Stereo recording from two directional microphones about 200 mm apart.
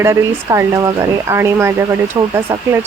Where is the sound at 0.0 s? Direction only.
15° right (ahead or behind).